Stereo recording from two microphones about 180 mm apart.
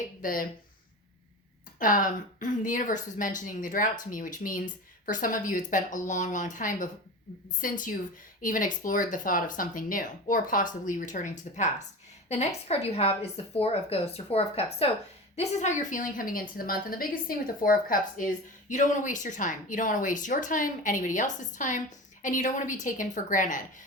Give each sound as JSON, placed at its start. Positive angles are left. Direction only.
{"t": 0.2, "sound": "speech", "side_deg": 50}
{"t": 1.8, "sound": "a woman's voice", "side_deg": 50}